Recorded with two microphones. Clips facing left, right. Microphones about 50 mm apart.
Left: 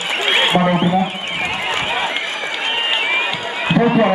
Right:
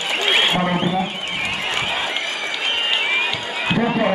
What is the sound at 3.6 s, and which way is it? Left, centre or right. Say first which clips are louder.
Speech: left 5 dB; centre.